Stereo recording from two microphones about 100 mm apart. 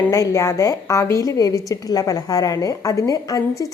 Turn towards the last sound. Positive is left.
turn(degrees=35)  # may be behind; listen again after turning